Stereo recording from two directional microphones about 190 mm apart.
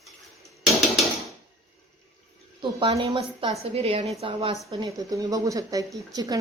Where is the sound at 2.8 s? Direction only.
30° right (ahead or behind).